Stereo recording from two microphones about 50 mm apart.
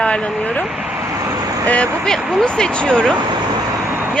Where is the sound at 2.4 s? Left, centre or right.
Centre.